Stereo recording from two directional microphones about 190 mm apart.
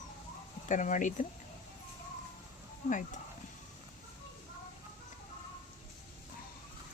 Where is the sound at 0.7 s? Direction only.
40° left (ahead or behind).